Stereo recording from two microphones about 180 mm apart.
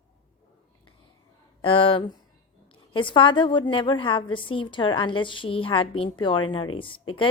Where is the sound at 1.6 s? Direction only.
30° left (ahead or behind).